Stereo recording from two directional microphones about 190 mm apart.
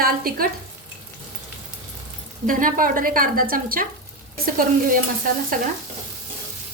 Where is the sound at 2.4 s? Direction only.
45° right (ahead or behind).